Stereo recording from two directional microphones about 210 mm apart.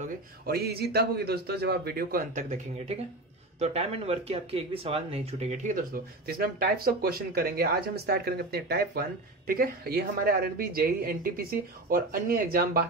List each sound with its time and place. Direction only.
0.0 s speech: 50° right (ahead or behind)